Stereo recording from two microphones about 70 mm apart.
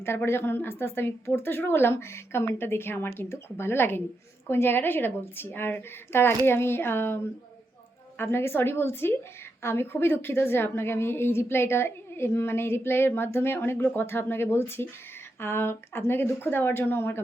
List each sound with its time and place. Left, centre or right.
0.3 s a woman's voice: left
8.2 s a woman's voice: left